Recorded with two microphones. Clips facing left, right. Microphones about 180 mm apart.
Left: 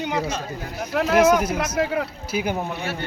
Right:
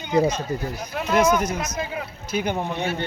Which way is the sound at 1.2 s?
10° left (ahead or behind).